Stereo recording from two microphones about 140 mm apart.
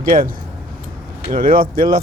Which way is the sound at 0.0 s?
80° right.